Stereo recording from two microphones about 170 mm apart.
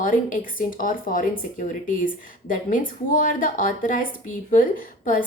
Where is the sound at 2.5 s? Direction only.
50° left (ahead or behind).